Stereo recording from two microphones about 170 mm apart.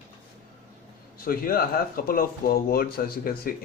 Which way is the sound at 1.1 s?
60° left (ahead or behind).